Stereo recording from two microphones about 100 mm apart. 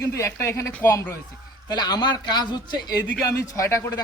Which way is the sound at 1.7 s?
45° left (ahead or behind).